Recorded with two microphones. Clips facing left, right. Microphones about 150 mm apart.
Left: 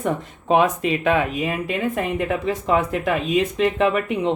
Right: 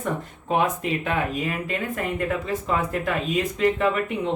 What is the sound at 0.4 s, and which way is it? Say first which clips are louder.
A woman's voice: left 5 dB; 90° left.